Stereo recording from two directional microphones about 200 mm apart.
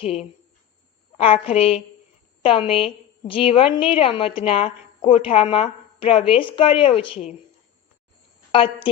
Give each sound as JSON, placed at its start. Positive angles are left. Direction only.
{"t": 0.0, "sound": "a woman's voice", "side_deg": 30}
{"t": 8.5, "sound": "a woman's voice", "side_deg": 25}